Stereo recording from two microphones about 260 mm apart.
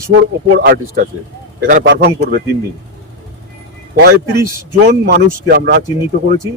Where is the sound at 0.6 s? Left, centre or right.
Right.